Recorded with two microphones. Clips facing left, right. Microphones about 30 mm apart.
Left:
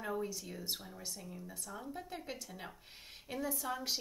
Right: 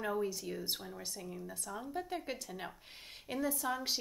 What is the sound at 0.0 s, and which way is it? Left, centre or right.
A woman's voice, centre.